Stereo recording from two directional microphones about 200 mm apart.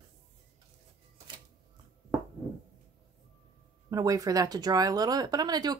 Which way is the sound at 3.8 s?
15° right (ahead or behind).